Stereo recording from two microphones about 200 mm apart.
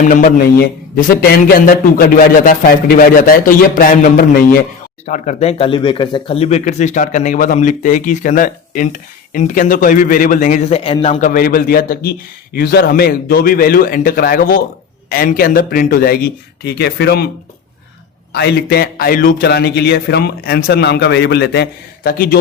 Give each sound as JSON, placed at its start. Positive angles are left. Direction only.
{"t": 0.0, "sound": "a man's voice", "side_deg": 40}
{"t": 11.3, "sound": "a man's voice", "side_deg": 50}
{"t": 18.3, "sound": "a man's voice", "side_deg": 55}